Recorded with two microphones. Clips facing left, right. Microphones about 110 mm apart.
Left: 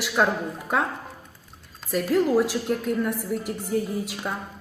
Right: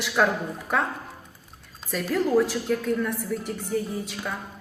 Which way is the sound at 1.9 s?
5° left (ahead or behind).